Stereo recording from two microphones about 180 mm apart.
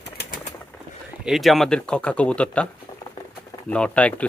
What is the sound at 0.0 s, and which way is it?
Bird, 65° left (ahead or behind).